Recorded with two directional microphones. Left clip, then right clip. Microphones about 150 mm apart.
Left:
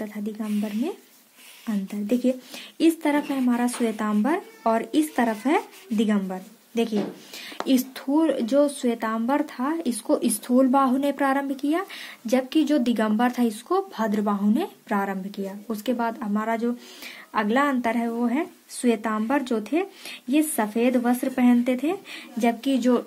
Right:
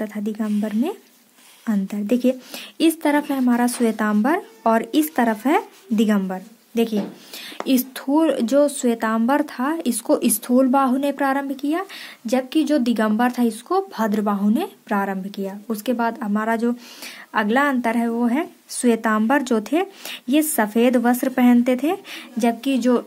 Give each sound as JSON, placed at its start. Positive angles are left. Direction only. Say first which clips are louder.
{"t": 0.0, "sound": "speech", "louder": "right 6 dB", "side_deg": -40}